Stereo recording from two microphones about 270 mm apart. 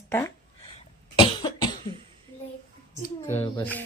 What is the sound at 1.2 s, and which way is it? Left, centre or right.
Cough, centre.